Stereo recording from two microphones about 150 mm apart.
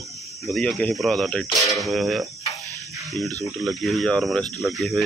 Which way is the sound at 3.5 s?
Centre (ahead or behind).